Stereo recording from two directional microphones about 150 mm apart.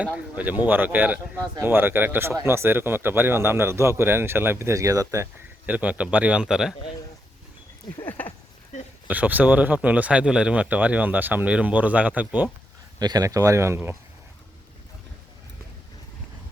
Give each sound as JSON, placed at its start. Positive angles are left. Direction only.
{"t": 0.0, "sound": "speech", "side_deg": -10}
{"t": 8.0, "sound": "a sound", "side_deg": 10}
{"t": 9.0, "sound": "speech", "side_deg": -10}
{"t": 13.0, "sound": "speech", "side_deg": -25}